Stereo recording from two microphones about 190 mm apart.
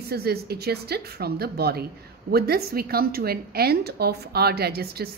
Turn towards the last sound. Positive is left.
turn(degrees=-55)  # may be behind; listen again after turning